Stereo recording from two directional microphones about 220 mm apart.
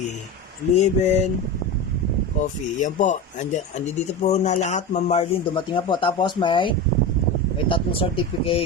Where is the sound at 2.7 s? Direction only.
35° left (ahead or behind).